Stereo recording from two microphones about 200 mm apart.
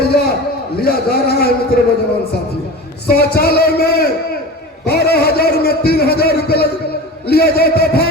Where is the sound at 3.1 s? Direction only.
50° left (ahead or behind).